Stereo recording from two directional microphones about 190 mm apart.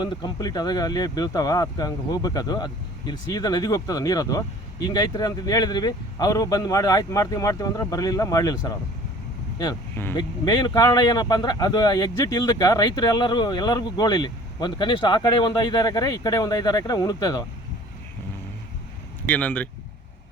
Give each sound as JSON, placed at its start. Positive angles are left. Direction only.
{"t": 0.0, "sound": "speech", "side_deg": 25}
{"t": 10.2, "sound": "speech", "side_deg": 25}
{"t": 19.3, "sound": "speech", "side_deg": 5}